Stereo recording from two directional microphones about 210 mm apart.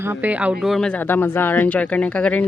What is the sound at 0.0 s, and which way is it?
Speech, 10° right (ahead or behind).